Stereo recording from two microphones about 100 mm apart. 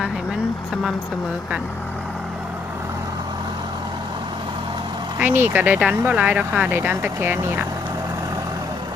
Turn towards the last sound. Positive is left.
turn(degrees=-20)  # may be behind; listen again after turning